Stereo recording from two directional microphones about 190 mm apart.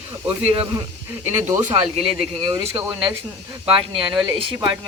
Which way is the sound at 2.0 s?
25° right (ahead or behind).